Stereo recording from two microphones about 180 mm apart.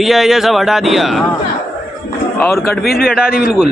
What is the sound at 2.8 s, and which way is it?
Speech, 55° left (ahead or behind).